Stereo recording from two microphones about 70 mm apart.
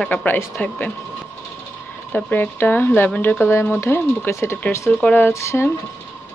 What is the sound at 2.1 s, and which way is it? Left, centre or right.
Speech, left.